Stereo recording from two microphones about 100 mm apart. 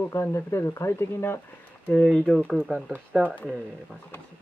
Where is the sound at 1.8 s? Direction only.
10° left (ahead or behind).